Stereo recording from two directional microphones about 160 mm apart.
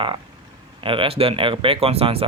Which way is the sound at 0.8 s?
30° right (ahead or behind).